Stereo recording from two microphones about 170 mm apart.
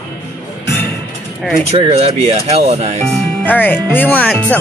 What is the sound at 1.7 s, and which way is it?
Speech, 35° right (ahead or behind).